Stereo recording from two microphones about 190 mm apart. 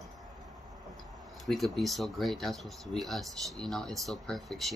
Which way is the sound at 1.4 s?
Centre (ahead or behind).